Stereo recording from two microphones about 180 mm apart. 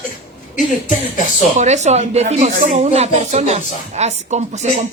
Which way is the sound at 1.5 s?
40° right (ahead or behind).